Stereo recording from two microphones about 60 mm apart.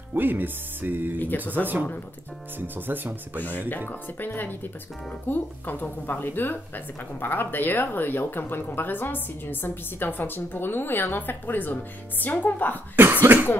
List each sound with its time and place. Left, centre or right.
0.1 s speech: right
3.9 s a woman's voice: left
12.9 s cough: right